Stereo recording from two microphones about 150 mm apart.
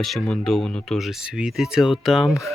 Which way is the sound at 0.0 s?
Centre (ahead or behind).